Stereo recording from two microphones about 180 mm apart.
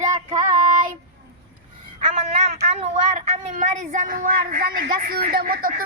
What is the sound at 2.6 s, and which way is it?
Speech, 40° right (ahead or behind).